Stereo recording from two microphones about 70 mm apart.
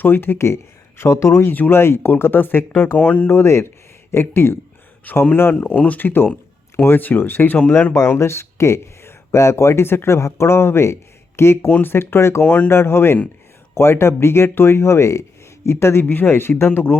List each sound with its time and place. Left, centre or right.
0.0 s speech: left
3.0 s speech: centre
3.3 s speech: left
5.1 s speech: left